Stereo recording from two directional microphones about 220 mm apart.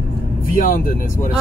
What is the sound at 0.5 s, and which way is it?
Speech, 35° left (ahead or behind).